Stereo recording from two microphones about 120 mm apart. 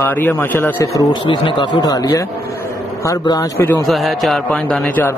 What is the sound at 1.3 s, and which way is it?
Speech, 40° left (ahead or behind).